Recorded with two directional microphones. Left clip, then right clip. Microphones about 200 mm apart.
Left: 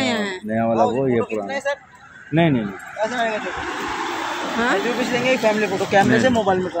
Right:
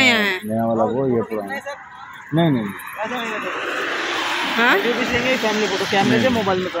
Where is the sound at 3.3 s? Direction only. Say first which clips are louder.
Right 1 dB; 50° left (ahead or behind).